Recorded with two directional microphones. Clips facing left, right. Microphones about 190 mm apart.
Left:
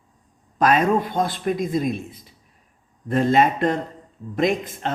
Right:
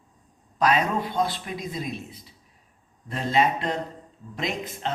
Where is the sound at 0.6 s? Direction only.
50° left (ahead or behind).